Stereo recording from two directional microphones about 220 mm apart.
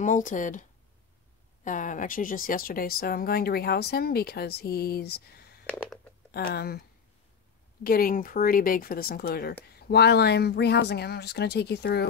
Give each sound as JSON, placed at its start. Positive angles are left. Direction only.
{"t": 0.0, "sound": "speech", "side_deg": 35}
{"t": 5.7, "sound": "a sound", "side_deg": 5}
{"t": 6.3, "sound": "speech", "side_deg": 45}
{"t": 7.8, "sound": "speech", "side_deg": 40}